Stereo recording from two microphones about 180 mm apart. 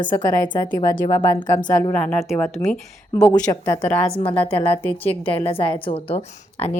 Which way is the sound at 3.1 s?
20° left (ahead or behind).